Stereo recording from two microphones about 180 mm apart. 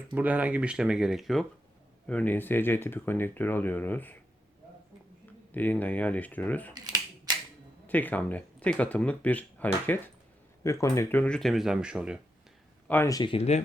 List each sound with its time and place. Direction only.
0.1 s speech: 10° right (ahead or behind); by 4.1 s 10° left (ahead or behind)
5.5 s speech: 10° left (ahead or behind)
6.7 s scissors: 20° right (ahead or behind)
7.9 s speech: 10° left (ahead or behind)
12.9 s speech: 15° left (ahead or behind); by 13.6 s 35° left (ahead or behind)